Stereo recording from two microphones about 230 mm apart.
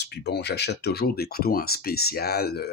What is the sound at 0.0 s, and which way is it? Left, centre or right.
Speech, left.